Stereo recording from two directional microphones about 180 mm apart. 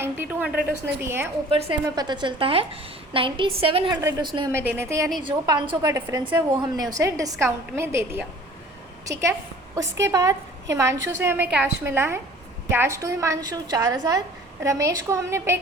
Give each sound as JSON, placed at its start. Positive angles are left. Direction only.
{"t": 0.0, "sound": "a sound", "side_deg": -10}
{"t": 1.0, "sound": "a woman's voice", "side_deg": -15}
{"t": 1.5, "sound": "a woman's voice", "side_deg": -35}
{"t": 4.5, "sound": "a woman's voice", "side_deg": -15}
{"t": 5.2, "sound": "a woman's voice", "side_deg": -25}
{"t": 10.0, "sound": "a woman's voice", "side_deg": -20}